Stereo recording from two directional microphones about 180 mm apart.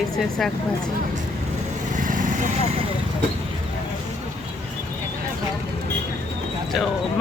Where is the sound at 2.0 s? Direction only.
45° right (ahead or behind).